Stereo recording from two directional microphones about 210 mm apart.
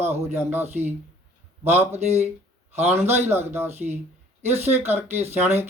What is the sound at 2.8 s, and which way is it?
Speech, 10° right (ahead or behind).